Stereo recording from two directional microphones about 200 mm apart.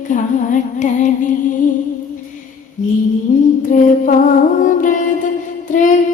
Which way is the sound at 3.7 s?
40° left (ahead or behind).